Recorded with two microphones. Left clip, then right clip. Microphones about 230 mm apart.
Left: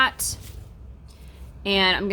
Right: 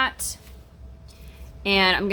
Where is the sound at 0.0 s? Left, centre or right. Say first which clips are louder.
Left 3 dB; centre.